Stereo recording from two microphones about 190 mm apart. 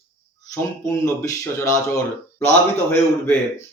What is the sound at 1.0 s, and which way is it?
Speech, 15° left (ahead or behind).